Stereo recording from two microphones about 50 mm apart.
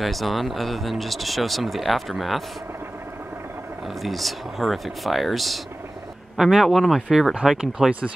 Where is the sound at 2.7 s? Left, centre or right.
Right.